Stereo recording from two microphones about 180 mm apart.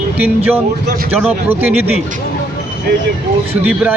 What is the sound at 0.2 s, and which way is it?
Speech, 10° right (ahead or behind).